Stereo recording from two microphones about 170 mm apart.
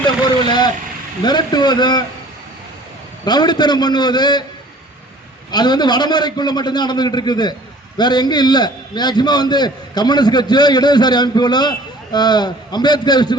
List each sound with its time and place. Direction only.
0.4 s a man's voice: 25° left (ahead or behind)
3.2 s a man's voice: 25° left (ahead or behind)
5.5 s a man's voice: 25° left (ahead or behind)